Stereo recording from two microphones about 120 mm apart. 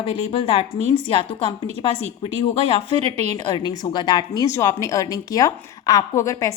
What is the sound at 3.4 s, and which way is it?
A woman's voice, 40° left (ahead or behind).